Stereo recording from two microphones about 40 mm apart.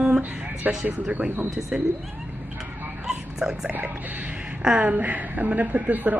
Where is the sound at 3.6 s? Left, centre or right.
Right.